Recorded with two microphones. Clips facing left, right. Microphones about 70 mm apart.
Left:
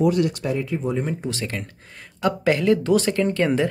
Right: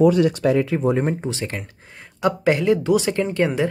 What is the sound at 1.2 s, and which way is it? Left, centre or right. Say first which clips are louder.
Speech: right 1 dB; right.